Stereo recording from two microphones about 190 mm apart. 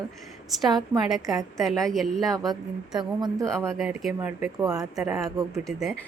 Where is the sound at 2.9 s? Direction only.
20° right (ahead or behind).